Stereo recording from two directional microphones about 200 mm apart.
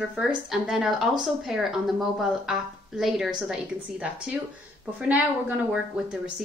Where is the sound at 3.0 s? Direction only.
Centre (ahead or behind).